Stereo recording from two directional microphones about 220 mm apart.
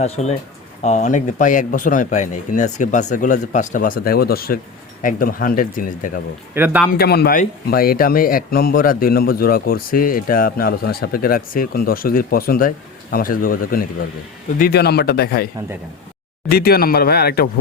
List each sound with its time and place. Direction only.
0.0 s speech: 30° left (ahead or behind)
6.5 s speech: 10° right (ahead or behind)
6.9 s speech: 45° left (ahead or behind)
16.5 s speech: 45° left (ahead or behind)